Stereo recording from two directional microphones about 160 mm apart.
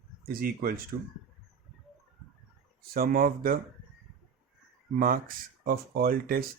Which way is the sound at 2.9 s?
65° right (ahead or behind).